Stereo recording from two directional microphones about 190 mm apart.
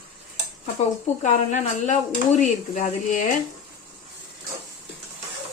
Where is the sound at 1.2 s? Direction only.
40° left (ahead or behind).